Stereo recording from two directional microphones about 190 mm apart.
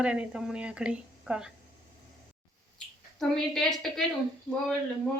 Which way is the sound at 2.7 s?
Centre (ahead or behind).